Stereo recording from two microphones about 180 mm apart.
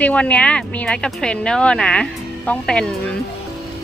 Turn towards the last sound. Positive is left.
turn(degrees=5)  # may be behind; listen again after turning